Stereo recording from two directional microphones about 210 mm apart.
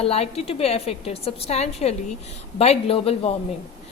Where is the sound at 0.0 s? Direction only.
30° left (ahead or behind).